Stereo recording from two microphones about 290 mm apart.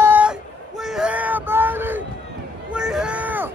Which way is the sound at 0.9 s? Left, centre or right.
Centre.